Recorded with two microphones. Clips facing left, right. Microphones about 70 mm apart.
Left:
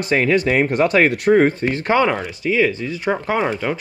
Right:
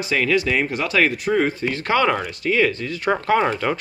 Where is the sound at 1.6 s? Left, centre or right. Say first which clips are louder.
Left 3 dB; left.